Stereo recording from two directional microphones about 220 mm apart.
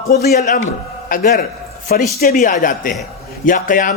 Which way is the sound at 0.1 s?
45° left (ahead or behind).